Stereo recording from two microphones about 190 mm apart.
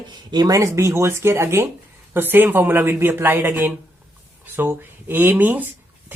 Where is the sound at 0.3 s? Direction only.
20° right (ahead or behind).